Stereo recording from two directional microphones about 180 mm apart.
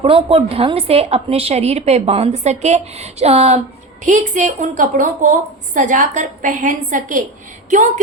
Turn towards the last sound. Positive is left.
turn(degrees=-45)  # may be behind; listen again after turning